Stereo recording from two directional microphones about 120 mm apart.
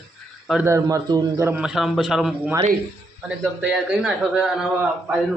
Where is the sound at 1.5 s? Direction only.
10° right (ahead or behind).